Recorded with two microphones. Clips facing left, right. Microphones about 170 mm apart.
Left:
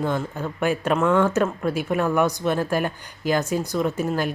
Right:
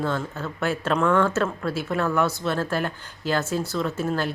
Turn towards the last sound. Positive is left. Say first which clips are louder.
# left 2 dB
turn(degrees=15)  # may be behind; listen again after turning